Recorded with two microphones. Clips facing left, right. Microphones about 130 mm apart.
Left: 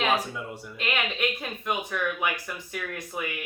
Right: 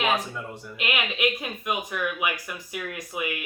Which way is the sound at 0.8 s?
10° right (ahead or behind).